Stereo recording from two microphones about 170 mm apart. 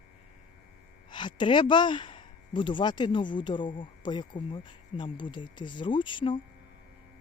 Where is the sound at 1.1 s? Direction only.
25° left (ahead or behind).